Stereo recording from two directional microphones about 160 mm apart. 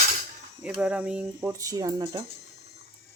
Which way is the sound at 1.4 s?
20° right (ahead or behind).